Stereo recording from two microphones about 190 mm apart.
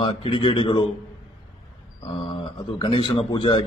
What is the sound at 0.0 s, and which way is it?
Speech, 25° left (ahead or behind).